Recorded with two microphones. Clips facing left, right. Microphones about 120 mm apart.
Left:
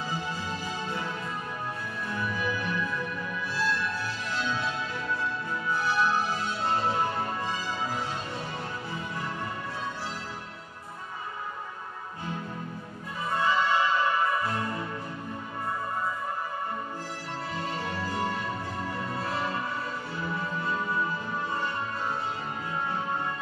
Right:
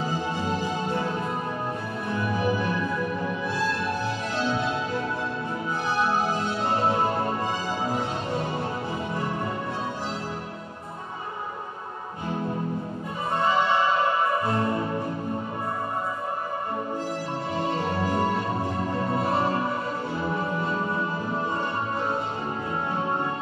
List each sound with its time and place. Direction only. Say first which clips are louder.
0.8 s music: right 6 dB; 30° right (ahead or behind)
2.2 s music: right 7 dB; 40° right (ahead or behind)
3.5 s music: even; 50° right (ahead or behind)
4.4 s music: right 5 dB; 30° right (ahead or behind)
6.8 s music: right 5 dB; 35° right (ahead or behind)
14.5 s music: right 7 dB; 35° right (ahead or behind)
17.6 s music: right 7 dB; 30° right (ahead or behind)
19.2 s music: right 6 dB; 35° right (ahead or behind)
20.7 s music: right 3 dB; 30° right (ahead or behind)